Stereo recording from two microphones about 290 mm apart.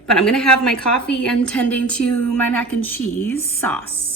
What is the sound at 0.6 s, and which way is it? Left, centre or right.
A woman's voice, centre.